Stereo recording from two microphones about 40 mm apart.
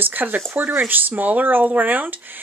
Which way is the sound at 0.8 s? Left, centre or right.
Right.